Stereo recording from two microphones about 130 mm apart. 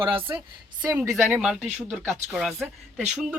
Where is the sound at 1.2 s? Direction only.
5° right (ahead or behind).